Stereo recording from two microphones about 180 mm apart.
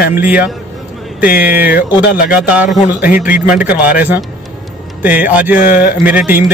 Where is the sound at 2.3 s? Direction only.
5° right (ahead or behind).